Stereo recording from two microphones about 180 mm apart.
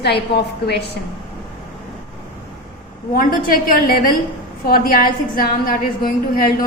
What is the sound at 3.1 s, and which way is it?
A woman's voice, 50° left (ahead or behind).